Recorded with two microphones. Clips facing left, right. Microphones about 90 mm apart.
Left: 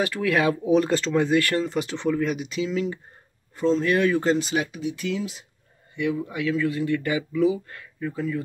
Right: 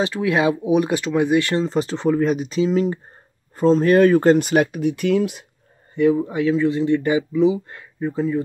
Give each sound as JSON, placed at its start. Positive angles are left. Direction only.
{"t": 0.0, "sound": "speech", "side_deg": -20}
{"t": 5.9, "sound": "speech", "side_deg": -35}